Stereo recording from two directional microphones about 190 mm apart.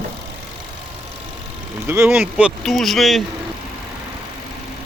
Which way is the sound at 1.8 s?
15° right (ahead or behind).